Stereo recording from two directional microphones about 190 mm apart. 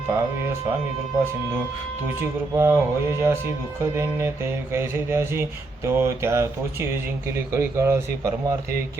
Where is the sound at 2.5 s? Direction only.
15° right (ahead or behind).